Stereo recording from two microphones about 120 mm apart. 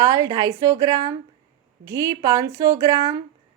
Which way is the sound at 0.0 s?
30° right (ahead or behind).